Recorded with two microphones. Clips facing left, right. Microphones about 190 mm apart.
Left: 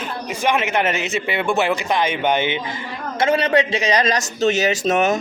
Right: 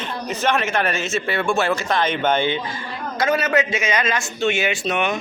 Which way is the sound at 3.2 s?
30° left (ahead or behind).